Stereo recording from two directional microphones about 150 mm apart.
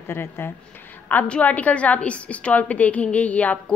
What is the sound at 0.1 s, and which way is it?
A woman's voice, 15° left (ahead or behind).